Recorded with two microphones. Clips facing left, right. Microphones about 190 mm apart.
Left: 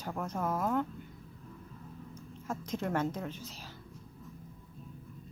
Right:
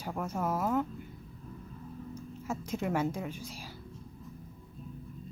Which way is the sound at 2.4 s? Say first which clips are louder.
Right 1 dB; 10° right (ahead or behind).